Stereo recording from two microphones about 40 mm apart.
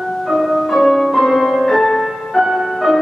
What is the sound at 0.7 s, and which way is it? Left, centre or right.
Music, centre.